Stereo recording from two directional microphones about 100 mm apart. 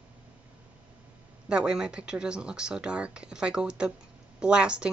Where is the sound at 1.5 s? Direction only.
10° right (ahead or behind).